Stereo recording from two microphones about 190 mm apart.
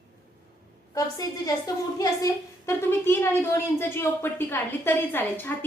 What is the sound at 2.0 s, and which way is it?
A woman's voice, 15° left (ahead or behind).